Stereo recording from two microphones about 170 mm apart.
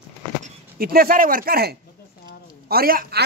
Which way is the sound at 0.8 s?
60° right (ahead or behind).